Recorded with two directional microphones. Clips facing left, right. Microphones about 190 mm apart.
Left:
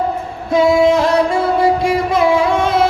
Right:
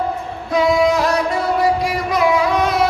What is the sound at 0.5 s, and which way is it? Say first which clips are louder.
Singing: left 4 dB; 25° left (ahead or behind).